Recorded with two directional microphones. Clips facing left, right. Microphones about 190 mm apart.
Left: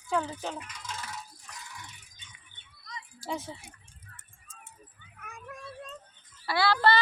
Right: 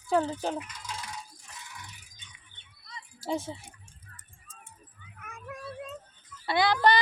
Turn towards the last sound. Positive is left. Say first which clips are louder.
# right 1 dB
turn(degrees=-15)  # may be behind; listen again after turning